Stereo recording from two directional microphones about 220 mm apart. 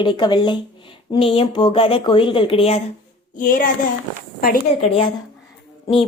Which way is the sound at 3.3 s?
40° left (ahead or behind).